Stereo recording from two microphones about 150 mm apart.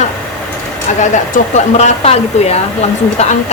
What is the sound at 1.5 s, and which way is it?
A woman's voice, 45° left (ahead or behind).